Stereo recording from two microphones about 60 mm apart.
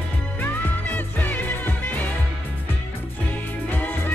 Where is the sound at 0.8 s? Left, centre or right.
Left.